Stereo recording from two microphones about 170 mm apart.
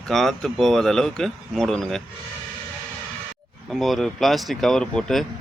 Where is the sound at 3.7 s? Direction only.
Centre (ahead or behind).